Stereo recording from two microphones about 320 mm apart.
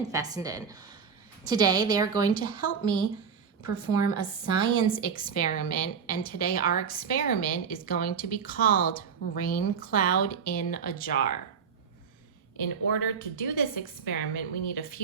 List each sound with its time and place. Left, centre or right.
0.1 s speech: centre
2.3 s a woman's voice: left
12.9 s a woman's voice: left